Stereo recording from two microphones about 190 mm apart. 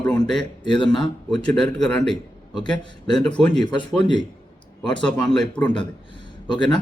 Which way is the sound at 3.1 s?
5° left (ahead or behind).